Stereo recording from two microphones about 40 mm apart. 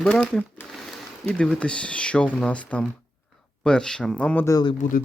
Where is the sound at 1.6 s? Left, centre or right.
Left.